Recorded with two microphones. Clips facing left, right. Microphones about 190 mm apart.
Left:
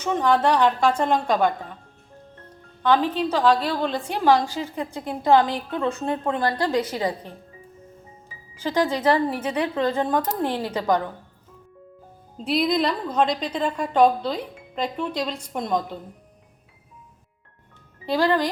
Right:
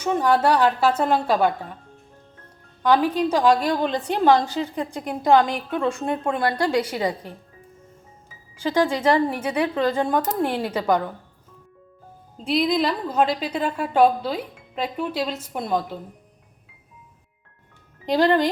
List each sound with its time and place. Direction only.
0.0 s a woman's voice: 10° right (ahead or behind)
2.8 s a woman's voice: 10° right (ahead or behind)
8.9 s a woman's voice: 10° right (ahead or behind)
12.4 s a woman's voice: centre (ahead or behind)
18.0 s speech: 20° right (ahead or behind)